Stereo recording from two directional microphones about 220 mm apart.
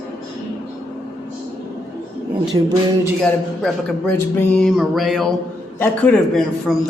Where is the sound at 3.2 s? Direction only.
5° left (ahead or behind).